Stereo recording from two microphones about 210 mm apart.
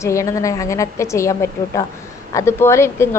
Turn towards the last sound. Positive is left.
turn(degrees=10)  # may be behind; listen again after turning